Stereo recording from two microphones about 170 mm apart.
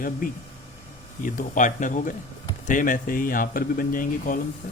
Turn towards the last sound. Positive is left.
turn(degrees=55)  # may be behind; listen again after turning